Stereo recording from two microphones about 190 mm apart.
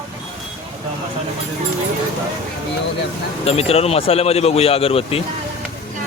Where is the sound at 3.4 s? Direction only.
30° left (ahead or behind).